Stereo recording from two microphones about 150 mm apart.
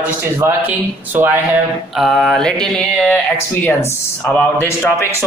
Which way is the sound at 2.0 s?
Centre (ahead or behind).